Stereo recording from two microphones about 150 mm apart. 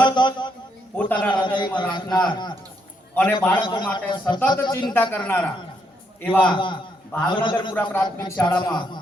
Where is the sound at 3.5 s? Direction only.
30° left (ahead or behind).